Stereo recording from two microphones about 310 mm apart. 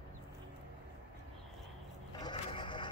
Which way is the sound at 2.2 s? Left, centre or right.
Centre.